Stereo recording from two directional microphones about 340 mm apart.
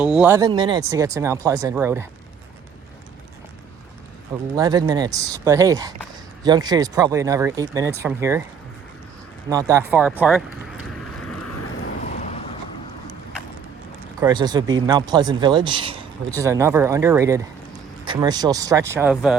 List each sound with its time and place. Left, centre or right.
0.0 s speech: centre
4.5 s speech: centre
9.5 s speech: centre
11.4 s vehicle: left
12.0 s vehicle: centre
14.2 s speech: centre